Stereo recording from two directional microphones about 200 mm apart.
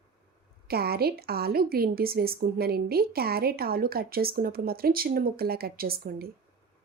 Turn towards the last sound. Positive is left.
turn(degrees=-50)  # may be behind; listen again after turning